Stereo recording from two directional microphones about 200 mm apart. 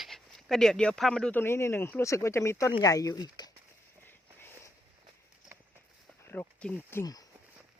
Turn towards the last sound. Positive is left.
turn(degrees=20)  # may be behind; listen again after turning